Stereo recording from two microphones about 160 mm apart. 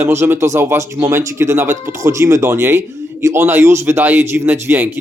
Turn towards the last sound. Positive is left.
turn(degrees=-10)  # may be behind; listen again after turning